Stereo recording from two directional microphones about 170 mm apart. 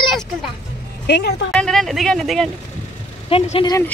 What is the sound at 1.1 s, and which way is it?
Speech, 75° left (ahead or behind).